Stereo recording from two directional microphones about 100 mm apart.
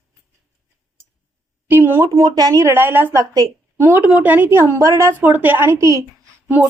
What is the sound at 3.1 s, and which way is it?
Speech, 40° right (ahead or behind).